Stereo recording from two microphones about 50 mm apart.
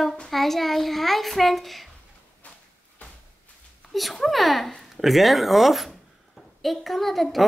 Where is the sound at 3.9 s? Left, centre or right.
Centre.